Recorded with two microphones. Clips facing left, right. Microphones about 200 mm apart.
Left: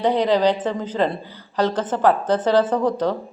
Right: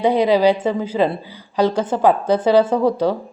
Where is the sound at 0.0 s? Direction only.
10° right (ahead or behind).